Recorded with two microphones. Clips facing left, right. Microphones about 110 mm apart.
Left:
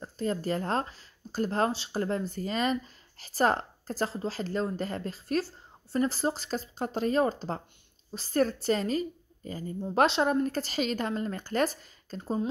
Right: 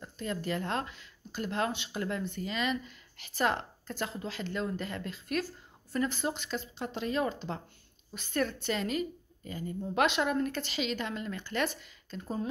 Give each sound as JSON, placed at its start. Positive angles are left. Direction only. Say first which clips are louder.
{"t": 0.0, "sound": "speech", "louder": "left 5 dB", "side_deg": 35}